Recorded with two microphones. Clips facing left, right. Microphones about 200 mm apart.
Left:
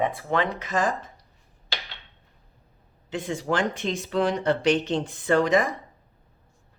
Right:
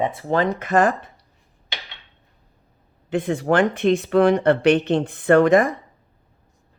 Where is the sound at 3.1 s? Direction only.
55° right (ahead or behind).